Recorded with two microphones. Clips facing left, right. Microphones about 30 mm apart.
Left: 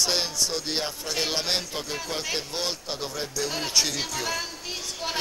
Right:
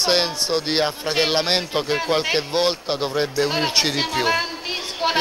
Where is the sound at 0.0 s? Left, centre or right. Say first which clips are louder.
Right 6 dB; right.